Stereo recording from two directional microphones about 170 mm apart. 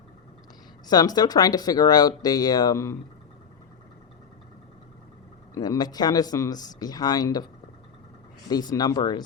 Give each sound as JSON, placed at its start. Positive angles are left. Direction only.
{"t": 0.9, "sound": "speech", "side_deg": 25}
{"t": 5.5, "sound": "speech", "side_deg": 25}
{"t": 8.4, "sound": "speech", "side_deg": 20}